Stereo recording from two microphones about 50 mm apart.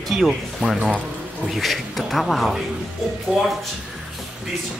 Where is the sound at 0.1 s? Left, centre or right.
Centre.